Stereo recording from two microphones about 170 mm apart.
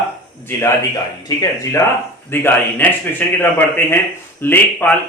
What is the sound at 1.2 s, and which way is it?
A man's voice, 25° left (ahead or behind).